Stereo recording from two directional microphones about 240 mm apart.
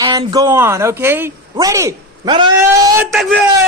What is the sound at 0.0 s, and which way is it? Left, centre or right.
Speech, centre.